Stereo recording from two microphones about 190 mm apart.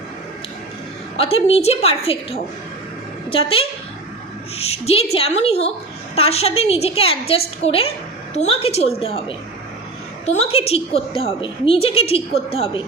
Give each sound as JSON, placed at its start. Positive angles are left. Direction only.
{"t": 1.1, "sound": "a woman's voice", "side_deg": 30}
{"t": 10.2, "sound": "a woman's voice", "side_deg": 30}